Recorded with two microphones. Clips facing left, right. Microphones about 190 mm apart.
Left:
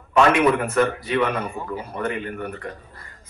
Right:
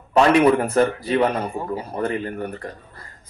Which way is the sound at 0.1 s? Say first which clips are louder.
Right 2 dB; 35° right (ahead or behind).